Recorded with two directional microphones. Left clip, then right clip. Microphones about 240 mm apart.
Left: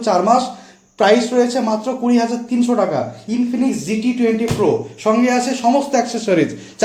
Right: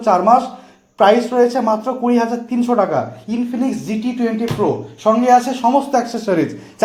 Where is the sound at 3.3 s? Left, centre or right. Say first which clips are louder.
Left 1 dB; right.